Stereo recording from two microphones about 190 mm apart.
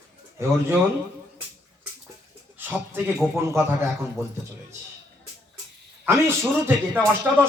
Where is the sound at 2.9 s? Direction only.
10° right (ahead or behind).